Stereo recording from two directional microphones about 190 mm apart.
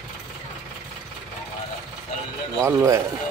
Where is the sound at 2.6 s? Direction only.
15° right (ahead or behind).